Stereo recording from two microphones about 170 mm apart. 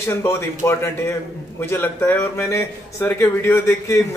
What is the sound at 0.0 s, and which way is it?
Speech, 15° left (ahead or behind).